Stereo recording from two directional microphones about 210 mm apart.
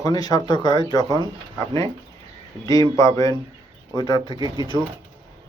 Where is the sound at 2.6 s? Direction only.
15° left (ahead or behind).